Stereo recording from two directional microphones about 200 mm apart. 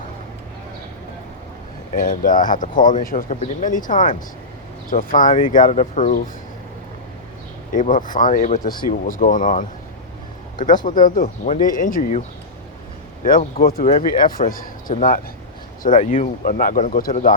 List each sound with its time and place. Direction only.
2.0 s speech: 40° left (ahead or behind)
7.7 s speech: 40° left (ahead or behind)
10.8 s speech: 40° left (ahead or behind)
13.2 s speech: 45° left (ahead or behind)